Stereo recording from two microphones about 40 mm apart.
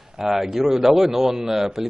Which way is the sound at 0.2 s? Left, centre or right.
Centre.